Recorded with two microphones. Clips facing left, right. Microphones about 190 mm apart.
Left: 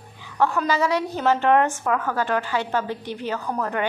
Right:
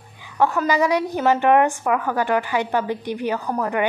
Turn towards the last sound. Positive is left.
turn(degrees=-10)  # may be behind; listen again after turning